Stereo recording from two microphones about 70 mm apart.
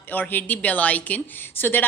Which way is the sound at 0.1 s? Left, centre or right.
Left.